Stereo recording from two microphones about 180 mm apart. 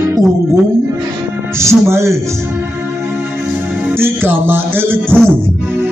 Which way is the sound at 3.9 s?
10° right (ahead or behind).